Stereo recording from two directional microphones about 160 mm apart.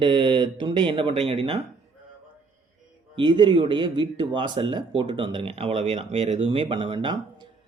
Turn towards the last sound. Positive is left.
turn(degrees=-30)  # may be behind; listen again after turning